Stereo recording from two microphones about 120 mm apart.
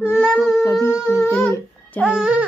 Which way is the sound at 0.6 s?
20° left (ahead or behind).